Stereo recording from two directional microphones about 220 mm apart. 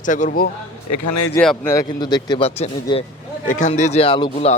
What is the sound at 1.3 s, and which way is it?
A man's voice, 10° left (ahead or behind).